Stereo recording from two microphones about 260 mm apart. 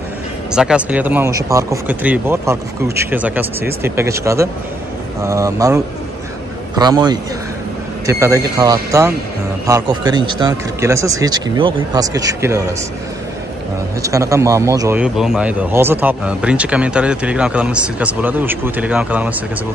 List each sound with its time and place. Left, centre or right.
0.5 s speech: centre
6.8 s speech: centre
14.0 s a man's voice: centre